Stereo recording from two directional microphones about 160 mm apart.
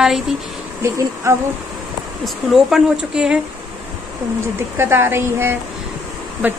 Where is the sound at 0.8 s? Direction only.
15° right (ahead or behind).